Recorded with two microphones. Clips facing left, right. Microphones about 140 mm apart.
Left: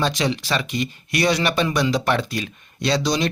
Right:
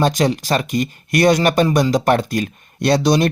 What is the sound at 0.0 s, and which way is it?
Speech, 45° right (ahead or behind).